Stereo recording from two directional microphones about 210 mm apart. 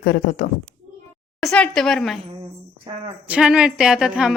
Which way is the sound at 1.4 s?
5° left (ahead or behind).